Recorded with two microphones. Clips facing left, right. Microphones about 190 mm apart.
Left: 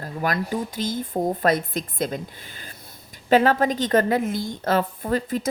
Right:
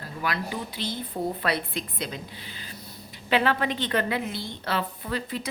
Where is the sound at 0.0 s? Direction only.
45° left (ahead or behind).